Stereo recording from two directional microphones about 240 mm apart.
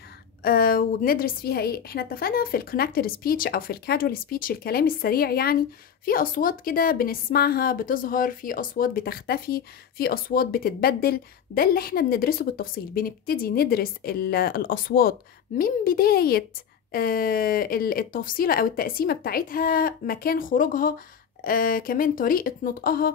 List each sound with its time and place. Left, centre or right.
0.4 s a woman's voice: left